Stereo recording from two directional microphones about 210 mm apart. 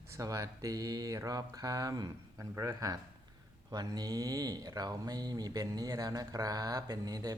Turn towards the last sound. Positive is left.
turn(degrees=-15)  # may be behind; listen again after turning